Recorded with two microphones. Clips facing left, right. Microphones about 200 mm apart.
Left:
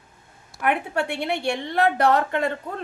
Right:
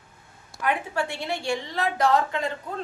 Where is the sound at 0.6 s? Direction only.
60° left (ahead or behind).